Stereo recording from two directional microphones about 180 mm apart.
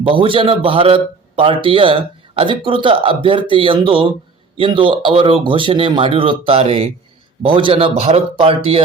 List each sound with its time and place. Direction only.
0.0 s a man's voice: 30° right (ahead or behind)